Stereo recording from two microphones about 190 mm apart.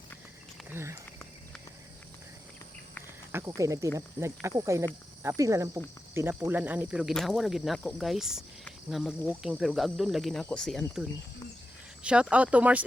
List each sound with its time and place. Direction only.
0.7 s speech: 15° right (ahead or behind)
3.3 s speech: 15° right (ahead or behind); by 10.8 s 5° left (ahead or behind)
12.0 s speech: 5° right (ahead or behind)